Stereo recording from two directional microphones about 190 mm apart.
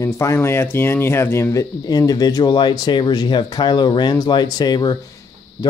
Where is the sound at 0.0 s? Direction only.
15° left (ahead or behind).